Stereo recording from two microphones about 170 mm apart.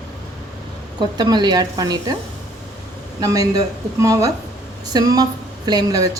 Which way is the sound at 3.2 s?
20° right (ahead or behind).